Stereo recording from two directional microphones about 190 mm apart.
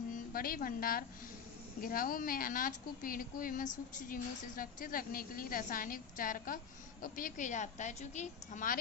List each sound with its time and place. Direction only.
0.1 s a woman's voice: 50° left (ahead or behind)